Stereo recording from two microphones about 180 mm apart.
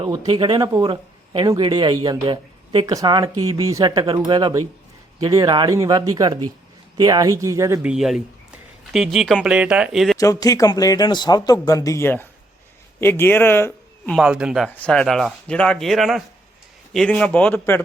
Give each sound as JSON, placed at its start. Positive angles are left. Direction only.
{"t": 0.0, "sound": "speech", "side_deg": -20}
{"t": 4.0, "sound": "speech", "side_deg": -30}
{"t": 10.2, "sound": "speech", "side_deg": 20}
{"t": 14.2, "sound": "speech", "side_deg": -5}